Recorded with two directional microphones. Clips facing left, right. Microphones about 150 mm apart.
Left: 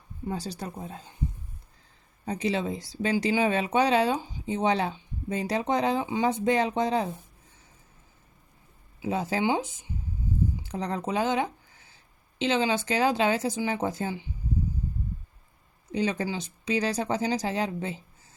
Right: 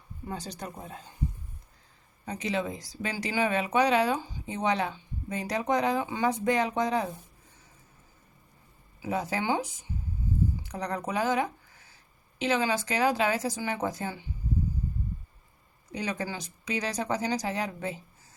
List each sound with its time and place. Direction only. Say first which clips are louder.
0.3 s speech: left 4 dB; 30° left (ahead or behind)
2.2 s speech: left 3 dB; 30° left (ahead or behind)
9.0 s speech: left 3 dB; 25° left (ahead or behind)
15.9 s speech: left 5 dB; 25° left (ahead or behind)